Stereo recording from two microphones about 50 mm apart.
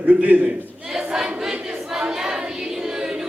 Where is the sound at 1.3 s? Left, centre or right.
Centre.